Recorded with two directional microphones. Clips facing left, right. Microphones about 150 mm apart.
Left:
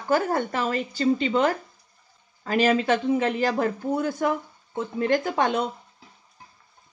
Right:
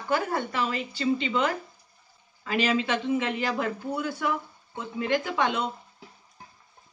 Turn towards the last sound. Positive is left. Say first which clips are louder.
# left 3 dB
turn(degrees=45)  # may be behind; listen again after turning